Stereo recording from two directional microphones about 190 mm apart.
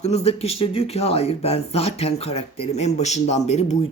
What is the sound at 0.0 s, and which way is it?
Speech, 35° left (ahead or behind).